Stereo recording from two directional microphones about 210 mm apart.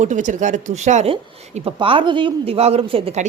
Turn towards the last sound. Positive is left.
turn(degrees=-25)  # may be behind; listen again after turning